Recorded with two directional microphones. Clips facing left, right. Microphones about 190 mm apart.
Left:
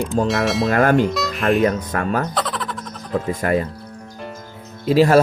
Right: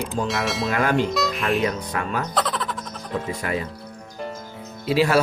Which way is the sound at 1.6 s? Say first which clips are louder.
Left 6 dB; 45° left (ahead or behind).